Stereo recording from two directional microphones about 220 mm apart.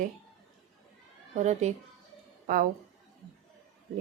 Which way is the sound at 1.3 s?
30° right (ahead or behind).